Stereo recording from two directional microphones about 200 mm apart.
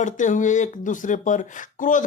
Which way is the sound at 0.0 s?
40° left (ahead or behind).